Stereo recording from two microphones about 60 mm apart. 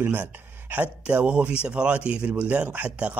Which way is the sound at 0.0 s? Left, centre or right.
Right.